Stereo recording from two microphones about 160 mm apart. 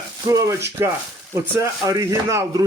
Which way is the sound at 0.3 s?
20° right (ahead or behind).